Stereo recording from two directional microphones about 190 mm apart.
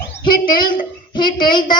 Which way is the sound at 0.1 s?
25° left (ahead or behind).